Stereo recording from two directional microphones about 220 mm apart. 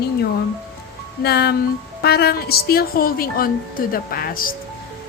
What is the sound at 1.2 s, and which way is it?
A woman's voice, 45° left (ahead or behind).